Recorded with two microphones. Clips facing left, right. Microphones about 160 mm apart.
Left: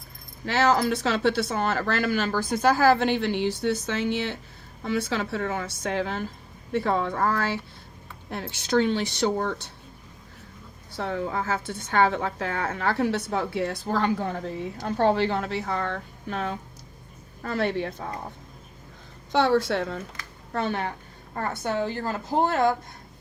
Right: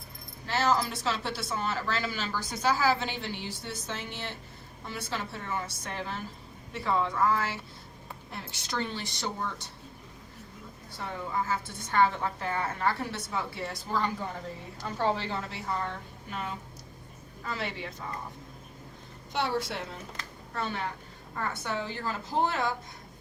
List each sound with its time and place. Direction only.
0.4 s speech: 75° left (ahead or behind)
4.8 s speech: 85° left; by 6.2 s 70° left (ahead or behind)
6.7 s speech: 55° left (ahead or behind)
10.9 s speech: 75° left (ahead or behind)
17.4 s speech: 60° left (ahead or behind)
19.3 s a woman's voice: 85° left
20.5 s speech: 60° left (ahead or behind)
21.3 s a woman's voice: 50° left (ahead or behind)